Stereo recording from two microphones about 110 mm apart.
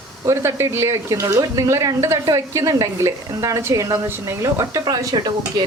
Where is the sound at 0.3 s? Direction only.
25° right (ahead or behind).